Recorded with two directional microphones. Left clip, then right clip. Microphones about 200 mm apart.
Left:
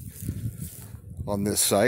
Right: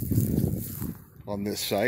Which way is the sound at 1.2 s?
25° left (ahead or behind).